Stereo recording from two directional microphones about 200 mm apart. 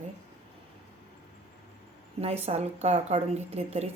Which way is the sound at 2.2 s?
30° right (ahead or behind).